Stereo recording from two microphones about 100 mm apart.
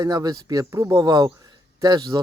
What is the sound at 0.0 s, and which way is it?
Speech, 35° right (ahead or behind).